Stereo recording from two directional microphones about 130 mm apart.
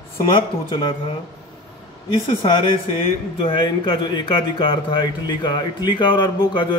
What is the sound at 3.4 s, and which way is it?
Speech, 40° left (ahead or behind).